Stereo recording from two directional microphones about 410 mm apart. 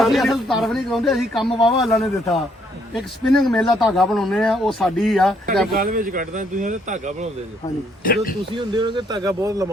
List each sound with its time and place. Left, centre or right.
0.0 s speech: centre
5.7 s speech: right
8.0 s speech: left
8.5 s speech: centre